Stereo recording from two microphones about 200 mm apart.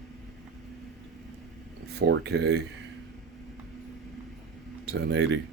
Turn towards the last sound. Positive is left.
turn(degrees=-60)  # may be behind; listen again after turning